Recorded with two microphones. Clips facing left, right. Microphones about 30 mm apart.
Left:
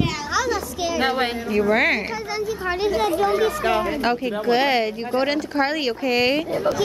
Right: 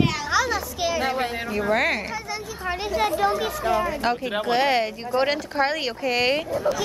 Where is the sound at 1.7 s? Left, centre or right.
Centre.